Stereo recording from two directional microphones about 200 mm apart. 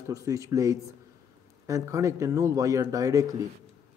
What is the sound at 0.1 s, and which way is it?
A man's voice, 15° right (ahead or behind).